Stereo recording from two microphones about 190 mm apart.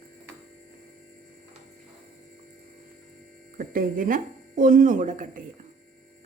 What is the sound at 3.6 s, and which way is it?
Speech, 45° right (ahead or behind).